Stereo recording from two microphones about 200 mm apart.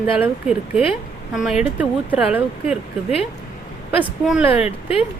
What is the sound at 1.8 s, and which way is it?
Speech, 5° right (ahead or behind).